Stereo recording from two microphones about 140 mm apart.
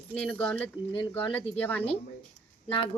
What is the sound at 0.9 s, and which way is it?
Speech, 40° left (ahead or behind).